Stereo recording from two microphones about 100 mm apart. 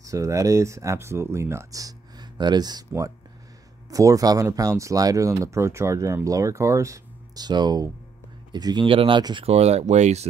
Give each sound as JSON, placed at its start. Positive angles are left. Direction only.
{"t": 0.0, "sound": "speech", "side_deg": -30}
{"t": 3.9, "sound": "speech", "side_deg": -35}
{"t": 8.8, "sound": "speech", "side_deg": -60}
{"t": 9.4, "sound": "speech", "side_deg": -90}